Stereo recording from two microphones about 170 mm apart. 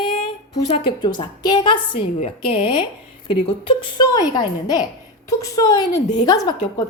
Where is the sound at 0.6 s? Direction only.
30° left (ahead or behind).